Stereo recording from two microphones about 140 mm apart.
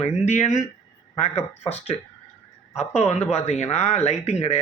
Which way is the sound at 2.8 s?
50° left (ahead or behind).